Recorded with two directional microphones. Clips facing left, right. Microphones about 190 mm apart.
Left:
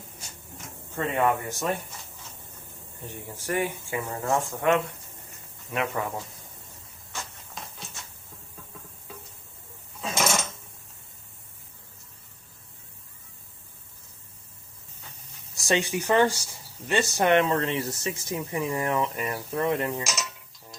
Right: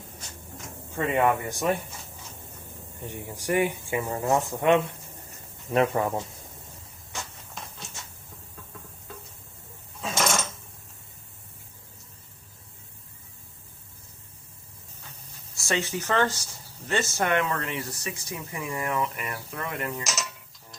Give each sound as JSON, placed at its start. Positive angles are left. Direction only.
{"t": 0.9, "sound": "speech", "side_deg": -10}
{"t": 3.0, "sound": "speech", "side_deg": -15}
{"t": 5.7, "sound": "speech", "side_deg": -35}
{"t": 7.2, "sound": "a sound", "side_deg": 0}
{"t": 10.0, "sound": "a sound", "side_deg": 5}
{"t": 15.5, "sound": "speech", "side_deg": 20}